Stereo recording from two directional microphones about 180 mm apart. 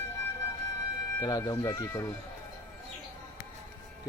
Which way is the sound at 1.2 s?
20° left (ahead or behind).